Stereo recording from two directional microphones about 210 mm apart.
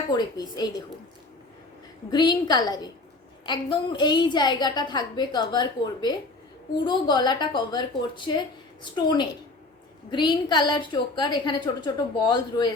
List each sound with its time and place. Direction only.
0.1 s a woman's voice: 20° left (ahead or behind)
2.0 s a woman's voice: 20° left (ahead or behind)